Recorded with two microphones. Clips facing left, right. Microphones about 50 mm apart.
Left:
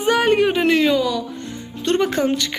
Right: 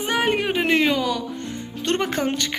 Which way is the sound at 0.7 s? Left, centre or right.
Right.